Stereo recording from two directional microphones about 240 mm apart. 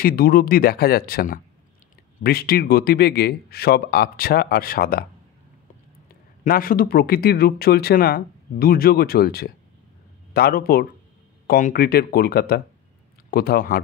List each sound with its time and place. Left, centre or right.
0.0 s speech: left
6.4 s speech: left